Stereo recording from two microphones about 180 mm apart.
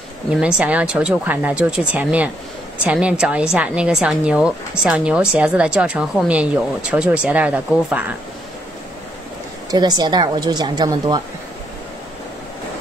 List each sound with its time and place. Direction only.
0.3 s a woman's voice: 5° right (ahead or behind)
9.7 s a woman's voice: 20° right (ahead or behind)